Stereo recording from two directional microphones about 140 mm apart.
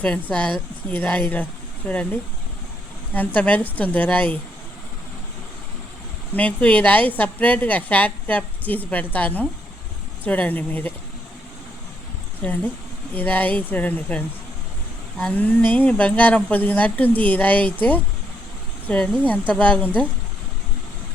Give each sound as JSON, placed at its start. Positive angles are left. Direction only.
{"t": 0.0, "sound": "a woman's voice", "side_deg": 10}
{"t": 3.2, "sound": "a woman's voice", "side_deg": 10}
{"t": 6.3, "sound": "a woman's voice", "side_deg": 10}
{"t": 12.4, "sound": "a woman's voice", "side_deg": 10}